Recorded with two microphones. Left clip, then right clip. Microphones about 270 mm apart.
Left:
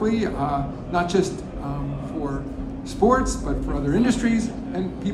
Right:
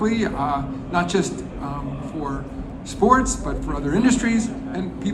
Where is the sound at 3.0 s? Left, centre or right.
Right.